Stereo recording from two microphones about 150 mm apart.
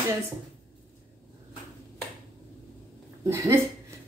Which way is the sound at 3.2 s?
20° right (ahead or behind).